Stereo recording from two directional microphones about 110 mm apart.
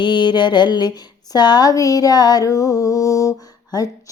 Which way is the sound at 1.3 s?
40° left (ahead or behind).